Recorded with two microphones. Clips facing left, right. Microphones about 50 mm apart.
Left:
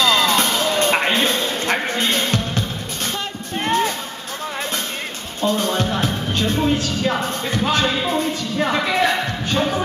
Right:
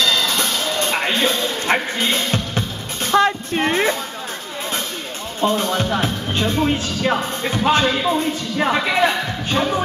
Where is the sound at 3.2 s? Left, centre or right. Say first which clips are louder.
Right 9 dB; right.